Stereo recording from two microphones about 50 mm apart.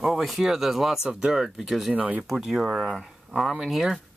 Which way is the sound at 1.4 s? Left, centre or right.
Centre.